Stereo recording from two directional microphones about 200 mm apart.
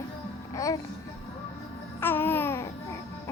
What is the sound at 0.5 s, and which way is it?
Music, 15° left (ahead or behind).